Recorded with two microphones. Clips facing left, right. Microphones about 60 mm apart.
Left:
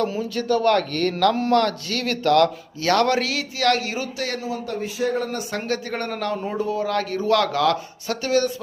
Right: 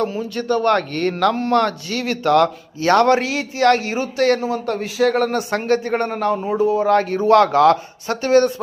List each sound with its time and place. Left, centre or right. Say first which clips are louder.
0.1 s a man's voice: right 1 dB; centre
0.7 s a man's voice: right 2 dB; centre; by 4.1 s right
4.2 s a man's voice: right 10 dB; right
5.3 s a man's voice: right 7 dB; right; by 6.7 s centre
6.7 s speech: right 7 dB; right